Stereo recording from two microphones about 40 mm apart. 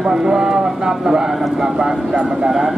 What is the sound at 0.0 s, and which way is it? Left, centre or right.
A man's voice, centre.